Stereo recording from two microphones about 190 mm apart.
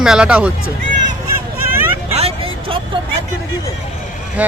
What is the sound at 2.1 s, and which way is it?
Vehicle, 30° right (ahead or behind).